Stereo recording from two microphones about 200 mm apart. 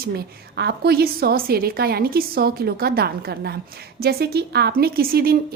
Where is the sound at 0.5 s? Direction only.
55° right (ahead or behind).